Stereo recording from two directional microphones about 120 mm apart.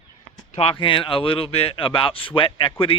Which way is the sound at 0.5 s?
50° left (ahead or behind).